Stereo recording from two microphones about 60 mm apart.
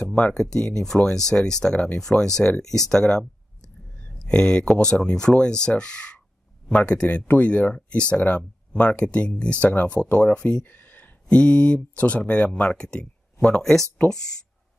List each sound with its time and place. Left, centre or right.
0.0 s speech: centre